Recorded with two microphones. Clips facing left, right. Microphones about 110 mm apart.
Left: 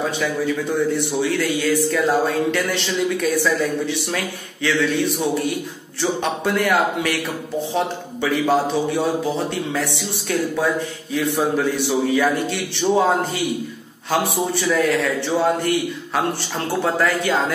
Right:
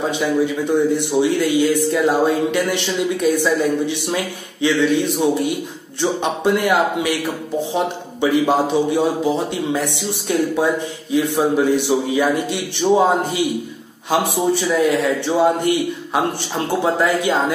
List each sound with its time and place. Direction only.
0.7 s speech: 15° right (ahead or behind)